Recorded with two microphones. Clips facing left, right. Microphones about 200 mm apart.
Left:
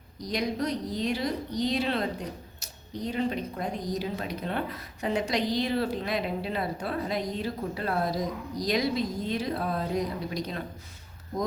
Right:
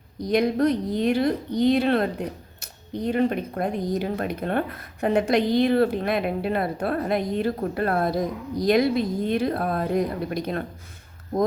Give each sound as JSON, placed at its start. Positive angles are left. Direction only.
{"t": 0.2, "sound": "a woman's voice", "side_deg": -55}